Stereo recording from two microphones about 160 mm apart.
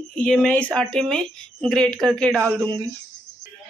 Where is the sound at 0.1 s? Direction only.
5° left (ahead or behind).